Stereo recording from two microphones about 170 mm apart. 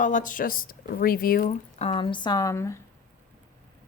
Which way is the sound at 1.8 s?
35° left (ahead or behind).